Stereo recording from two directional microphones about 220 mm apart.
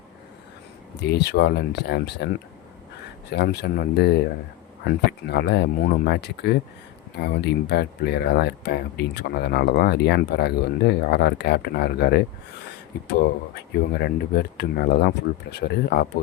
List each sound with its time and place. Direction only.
0.9 s speech: 50° left (ahead or behind)